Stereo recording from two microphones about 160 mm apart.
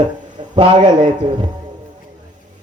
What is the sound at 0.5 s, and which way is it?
Speech, 30° right (ahead or behind).